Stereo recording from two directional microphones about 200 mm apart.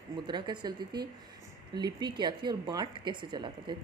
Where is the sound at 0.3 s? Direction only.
20° right (ahead or behind).